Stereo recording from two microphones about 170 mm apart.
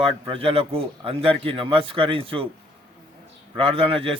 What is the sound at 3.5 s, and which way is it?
Speech, 35° right (ahead or behind).